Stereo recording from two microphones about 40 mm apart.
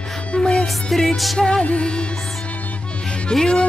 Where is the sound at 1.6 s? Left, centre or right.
Left.